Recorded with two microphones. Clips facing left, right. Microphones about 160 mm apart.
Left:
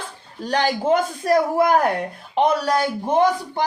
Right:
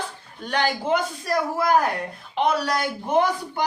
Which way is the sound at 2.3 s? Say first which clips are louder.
Left 4 dB; 40° left (ahead or behind).